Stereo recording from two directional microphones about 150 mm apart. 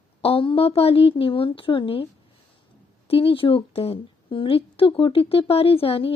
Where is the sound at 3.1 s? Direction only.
40° left (ahead or behind).